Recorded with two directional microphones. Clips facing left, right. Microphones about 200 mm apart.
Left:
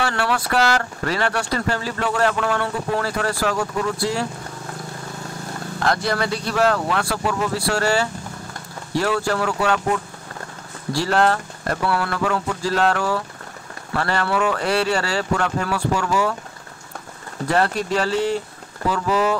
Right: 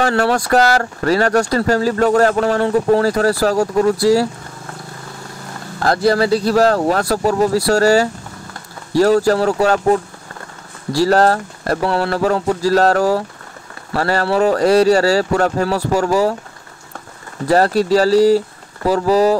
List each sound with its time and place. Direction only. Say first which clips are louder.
0.0 s speech: right 7 dB; 40° right (ahead or behind)
5.8 s speech: right 7 dB; 35° right (ahead or behind)
17.5 s speech: right 7 dB; 40° right (ahead or behind)